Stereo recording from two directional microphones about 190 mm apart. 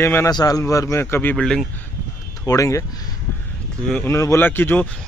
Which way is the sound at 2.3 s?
15° left (ahead or behind).